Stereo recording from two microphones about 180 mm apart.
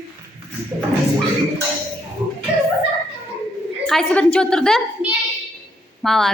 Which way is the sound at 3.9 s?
5° left (ahead or behind).